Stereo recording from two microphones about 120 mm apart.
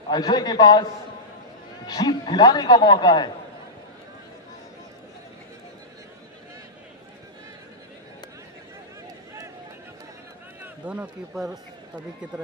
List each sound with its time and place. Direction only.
0.1 s a man's voice: 35° left (ahead or behind)
1.9 s a man's voice: 35° left (ahead or behind)
10.6 s speech: 10° right (ahead or behind)